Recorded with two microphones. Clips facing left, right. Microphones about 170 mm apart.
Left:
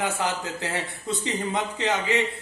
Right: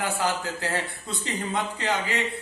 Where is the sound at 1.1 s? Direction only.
20° left (ahead or behind).